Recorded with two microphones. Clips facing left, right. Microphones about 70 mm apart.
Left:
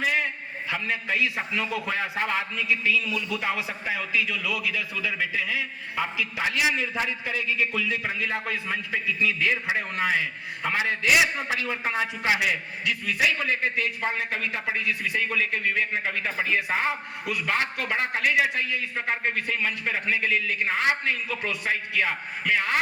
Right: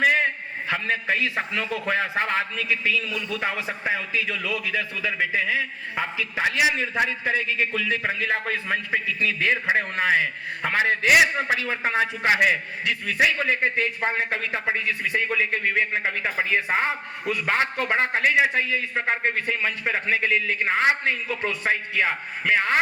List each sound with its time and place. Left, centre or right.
0.0 s a sound: right
0.7 s a man's voice: right
11.4 s a man's voice: right